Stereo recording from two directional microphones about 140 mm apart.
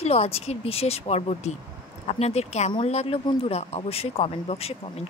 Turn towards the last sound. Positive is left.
turn(degrees=45)  # may be behind; listen again after turning